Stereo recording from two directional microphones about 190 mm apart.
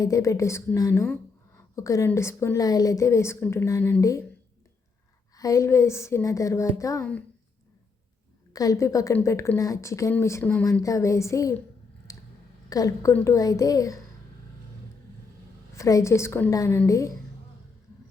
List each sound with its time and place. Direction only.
0.0 s a woman's voice: 15° left (ahead or behind)
5.4 s a woman's voice: 15° left (ahead or behind)
7.0 s a woman's voice: 5° left (ahead or behind)
8.5 s a woman's voice: 20° left (ahead or behind)
12.1 s a sound: 15° left (ahead or behind)
12.7 s a woman's voice: 15° left (ahead or behind)
15.7 s a woman's voice: 15° left (ahead or behind)